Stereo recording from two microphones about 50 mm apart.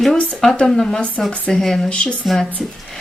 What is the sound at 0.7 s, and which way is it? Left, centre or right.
A woman's voice, centre.